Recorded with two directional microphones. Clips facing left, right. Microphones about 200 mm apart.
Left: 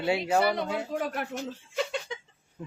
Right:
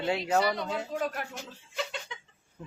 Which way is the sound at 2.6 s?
10° left (ahead or behind).